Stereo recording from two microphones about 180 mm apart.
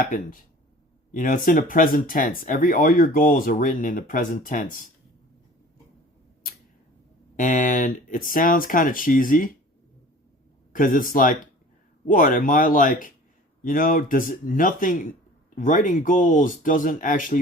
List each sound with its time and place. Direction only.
0.0 s speech: 50° left (ahead or behind)
7.3 s speech: 45° left (ahead or behind)
10.7 s speech: 50° left (ahead or behind)